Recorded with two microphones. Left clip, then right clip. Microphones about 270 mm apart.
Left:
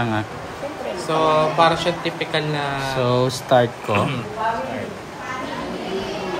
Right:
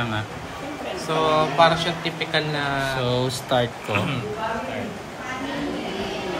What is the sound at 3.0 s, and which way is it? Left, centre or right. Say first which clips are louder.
Speech: left 5 dB; left.